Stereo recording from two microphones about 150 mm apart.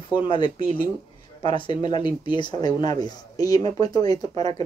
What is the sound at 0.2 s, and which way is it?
Speech, 30° left (ahead or behind).